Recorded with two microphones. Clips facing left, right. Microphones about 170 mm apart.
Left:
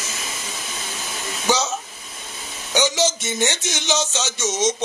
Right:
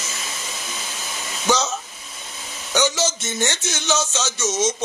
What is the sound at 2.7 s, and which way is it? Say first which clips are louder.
Speech: left 1 dB; 15° left (ahead or behind).